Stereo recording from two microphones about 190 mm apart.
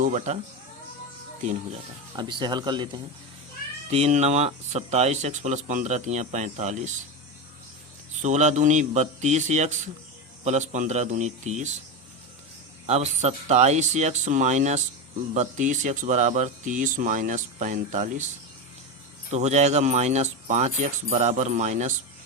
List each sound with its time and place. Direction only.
0.0 s speech: 40° right (ahead or behind)
2.1 s speech: 25° right (ahead or behind)
3.8 s speech: 35° right (ahead or behind)
8.2 s speech: 40° right (ahead or behind)
12.8 s speech: 35° right (ahead or behind)
19.3 s speech: 35° right (ahead or behind)